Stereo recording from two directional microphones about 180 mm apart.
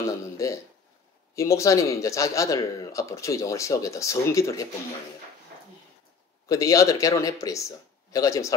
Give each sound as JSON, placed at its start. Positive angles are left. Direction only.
{"t": 0.0, "sound": "speech", "side_deg": 15}
{"t": 6.5, "sound": "speech", "side_deg": 20}